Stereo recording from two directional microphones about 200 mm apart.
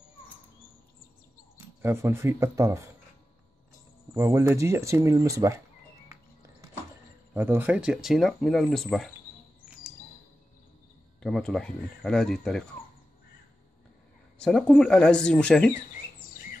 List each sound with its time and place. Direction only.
1.8 s speech: 10° right (ahead or behind)
4.1 s speech: 15° right (ahead or behind)
6.0 s music: 15° right (ahead or behind)
7.3 s speech: 10° right (ahead or behind)
11.2 s speech: centre (ahead or behind)
14.4 s speech: 5° left (ahead or behind)